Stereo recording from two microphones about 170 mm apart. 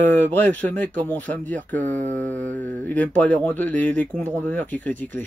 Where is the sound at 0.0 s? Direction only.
10° left (ahead or behind).